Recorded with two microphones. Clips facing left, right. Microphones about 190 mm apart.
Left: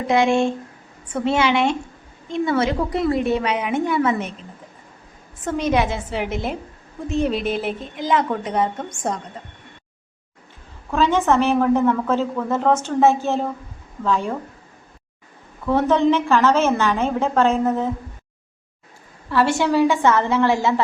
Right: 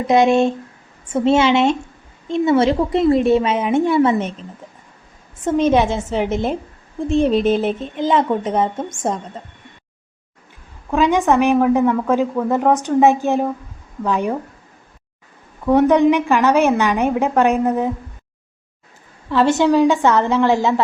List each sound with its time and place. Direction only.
0.1 s a woman's voice: 20° right (ahead or behind)
5.5 s a woman's voice: 25° right (ahead or behind)
10.9 s a woman's voice: 15° right (ahead or behind)
15.6 s a woman's voice: 15° right (ahead or behind)
19.3 s a woman's voice: 20° right (ahead or behind)